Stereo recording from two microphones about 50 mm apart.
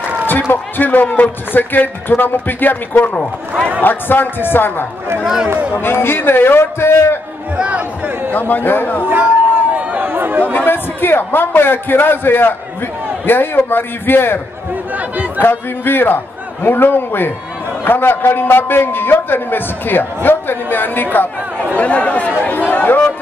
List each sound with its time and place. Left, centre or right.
0.3 s a man's voice: left
7.5 s speech: right
8.3 s a man's voice: left
9.0 s speech: right
10.0 s chatter: right
10.5 s a man's voice: left
21.7 s a man's voice: left